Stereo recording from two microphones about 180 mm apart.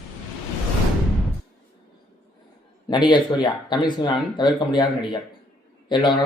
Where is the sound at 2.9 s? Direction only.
25° left (ahead or behind).